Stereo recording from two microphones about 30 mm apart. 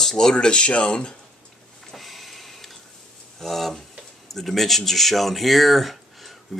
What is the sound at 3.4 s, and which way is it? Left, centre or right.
Speech, centre.